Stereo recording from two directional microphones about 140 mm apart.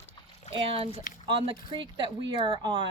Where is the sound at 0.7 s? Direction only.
45° right (ahead or behind).